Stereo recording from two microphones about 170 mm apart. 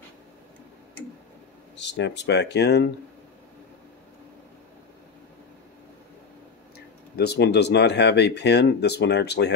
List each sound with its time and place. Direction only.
1.8 s speech: 90° left
7.2 s speech: 75° left (ahead or behind)